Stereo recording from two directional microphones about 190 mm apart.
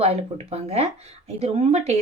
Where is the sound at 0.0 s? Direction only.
30° right (ahead or behind).